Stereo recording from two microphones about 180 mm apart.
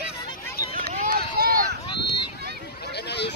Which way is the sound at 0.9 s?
50° right (ahead or behind).